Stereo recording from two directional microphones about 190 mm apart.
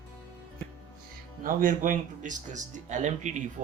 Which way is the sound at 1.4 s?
45° right (ahead or behind).